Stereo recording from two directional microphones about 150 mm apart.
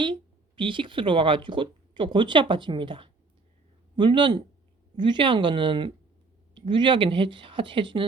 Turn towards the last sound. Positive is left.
turn(degrees=-35)  # may be behind; listen again after turning